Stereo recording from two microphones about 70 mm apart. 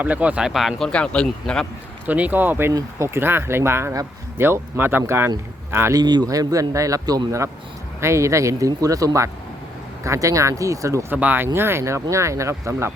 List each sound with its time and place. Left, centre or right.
0.0 s speech: right
0.4 s speech: centre
0.9 s speech: centre
2.0 s speech: right
6.0 s speech: right
6.2 s a man's voice: right
8.0 s speech: right
11.1 s speech: right